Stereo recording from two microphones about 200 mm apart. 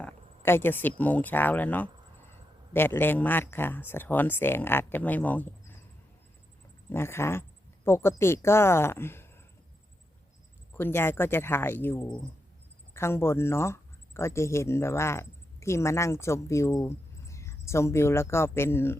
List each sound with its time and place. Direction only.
0.0 s speech: 10° left (ahead or behind)
6.9 s speech: 10° left (ahead or behind)
10.8 s speech: 10° left (ahead or behind)